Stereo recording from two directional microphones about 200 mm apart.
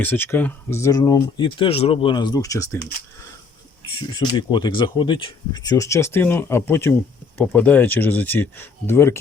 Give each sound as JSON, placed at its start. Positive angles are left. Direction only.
{"t": 0.0, "sound": "speech", "side_deg": 10}
{"t": 3.8, "sound": "speech", "side_deg": 20}